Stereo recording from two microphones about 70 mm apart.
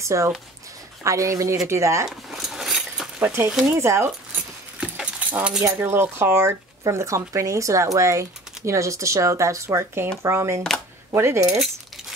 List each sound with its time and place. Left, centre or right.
0.0 s speech: right
2.0 s a sound: centre
3.2 s speech: right
3.6 s cutlery: right
4.7 s keys jangling: centre
5.3 s cutlery: centre
5.8 s cutlery: right
6.9 s speech: right
11.1 s cutlery: right